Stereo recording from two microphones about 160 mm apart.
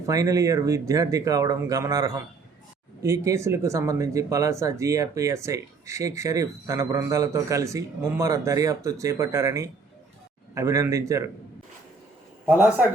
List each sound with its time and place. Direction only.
0.1 s speech: 20° right (ahead or behind)
12.5 s a man's voice: 10° right (ahead or behind)